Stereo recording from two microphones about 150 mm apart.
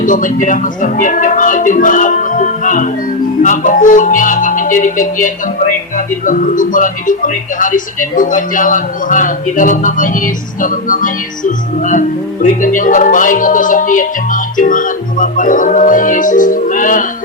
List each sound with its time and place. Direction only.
0.0 s speech: 60° left (ahead or behind)